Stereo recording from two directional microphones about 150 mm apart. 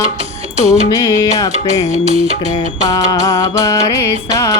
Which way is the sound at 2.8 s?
25° left (ahead or behind).